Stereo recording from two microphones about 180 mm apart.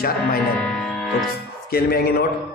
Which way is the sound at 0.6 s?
5° left (ahead or behind).